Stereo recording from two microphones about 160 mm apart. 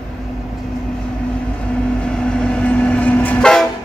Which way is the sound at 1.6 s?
5° left (ahead or behind).